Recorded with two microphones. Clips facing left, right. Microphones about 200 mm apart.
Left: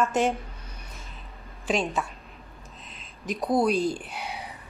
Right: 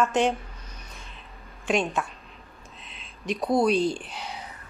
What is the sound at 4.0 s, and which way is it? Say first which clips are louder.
Speech: left 1 dB; 60° left (ahead or behind).